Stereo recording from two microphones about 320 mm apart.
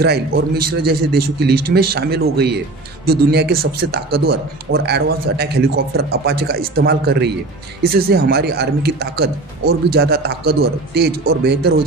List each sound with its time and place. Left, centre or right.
0.0 s a man's voice: right